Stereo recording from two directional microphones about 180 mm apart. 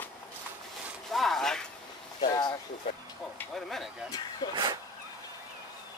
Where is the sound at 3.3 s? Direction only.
Centre (ahead or behind).